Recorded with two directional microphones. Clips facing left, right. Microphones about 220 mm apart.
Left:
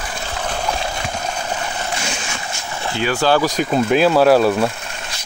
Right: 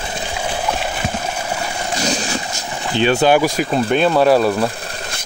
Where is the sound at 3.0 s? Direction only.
25° right (ahead or behind).